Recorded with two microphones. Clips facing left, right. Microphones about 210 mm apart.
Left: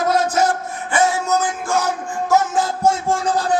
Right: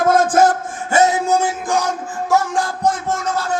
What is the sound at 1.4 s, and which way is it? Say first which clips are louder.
Music: right 1 dB; 10° right (ahead or behind).